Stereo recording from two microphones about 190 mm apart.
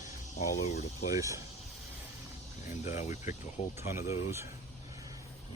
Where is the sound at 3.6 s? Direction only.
30° left (ahead or behind).